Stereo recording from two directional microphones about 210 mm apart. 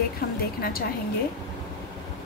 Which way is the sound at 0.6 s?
45° left (ahead or behind).